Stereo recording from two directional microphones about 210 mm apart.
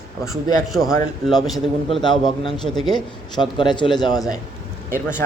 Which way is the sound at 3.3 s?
20° left (ahead or behind).